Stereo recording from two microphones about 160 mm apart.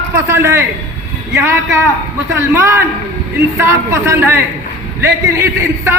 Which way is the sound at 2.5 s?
15° right (ahead or behind).